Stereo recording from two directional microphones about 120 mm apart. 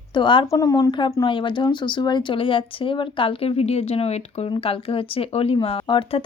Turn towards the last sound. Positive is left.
turn(degrees=45)  # may be behind; listen again after turning